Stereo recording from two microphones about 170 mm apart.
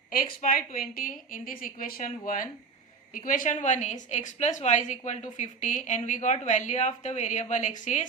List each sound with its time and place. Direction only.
0.4 s a woman's voice: 50° left (ahead or behind)